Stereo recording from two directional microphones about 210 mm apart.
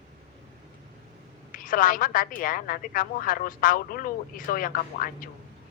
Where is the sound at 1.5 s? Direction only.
40° left (ahead or behind).